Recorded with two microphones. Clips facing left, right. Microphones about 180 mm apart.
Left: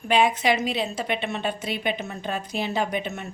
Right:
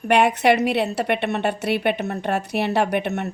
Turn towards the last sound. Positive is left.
turn(degrees=-65)  # may be behind; listen again after turning